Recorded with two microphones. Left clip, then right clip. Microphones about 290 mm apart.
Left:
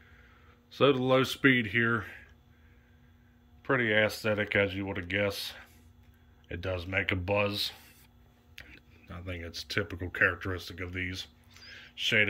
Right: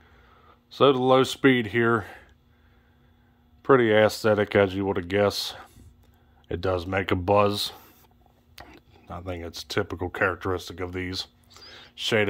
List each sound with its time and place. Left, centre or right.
0.0 s a sound: centre
3.6 s speech: right
8.5 s speech: centre